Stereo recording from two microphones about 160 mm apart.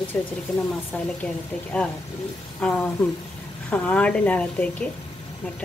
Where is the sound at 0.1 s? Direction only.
10° left (ahead or behind).